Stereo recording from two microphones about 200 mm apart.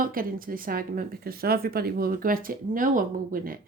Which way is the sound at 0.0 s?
45° right (ahead or behind).